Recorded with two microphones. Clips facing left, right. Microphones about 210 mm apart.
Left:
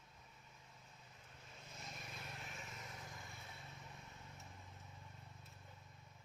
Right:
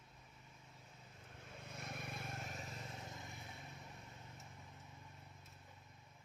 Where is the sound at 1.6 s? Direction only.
60° right (ahead or behind); by 2.8 s 40° right (ahead or behind).